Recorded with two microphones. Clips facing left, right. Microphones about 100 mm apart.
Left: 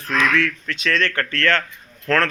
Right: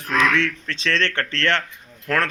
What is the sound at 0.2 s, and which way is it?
Speech, 25° right (ahead or behind).